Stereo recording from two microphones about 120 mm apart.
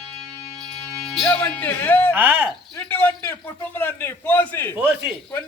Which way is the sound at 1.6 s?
15° left (ahead or behind).